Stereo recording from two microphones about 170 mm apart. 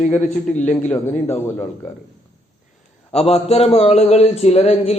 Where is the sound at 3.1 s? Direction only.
40° left (ahead or behind).